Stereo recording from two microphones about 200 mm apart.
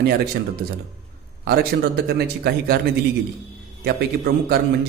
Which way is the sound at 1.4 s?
50° right (ahead or behind).